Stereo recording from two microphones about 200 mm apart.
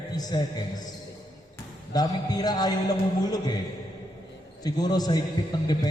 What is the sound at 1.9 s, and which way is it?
Mantra, 20° left (ahead or behind).